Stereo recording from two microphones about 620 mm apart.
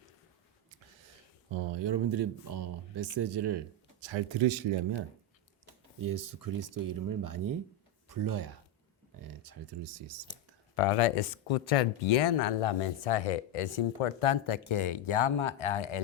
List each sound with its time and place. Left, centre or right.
1.5 s speech: right
6.0 s speech: right
10.8 s speech: left